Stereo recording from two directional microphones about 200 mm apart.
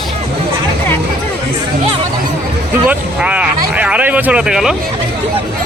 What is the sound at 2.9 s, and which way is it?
Speech, 5° right (ahead or behind).